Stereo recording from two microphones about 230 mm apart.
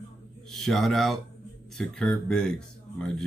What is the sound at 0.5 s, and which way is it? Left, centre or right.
Speech, centre.